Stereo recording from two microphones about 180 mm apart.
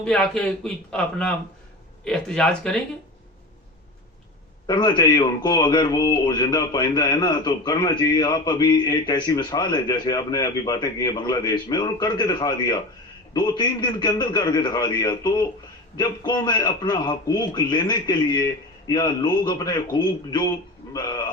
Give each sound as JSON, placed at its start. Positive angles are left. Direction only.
{"t": 0.0, "sound": "a man's voice", "side_deg": 5}
{"t": 4.6, "sound": "a man's voice", "side_deg": 25}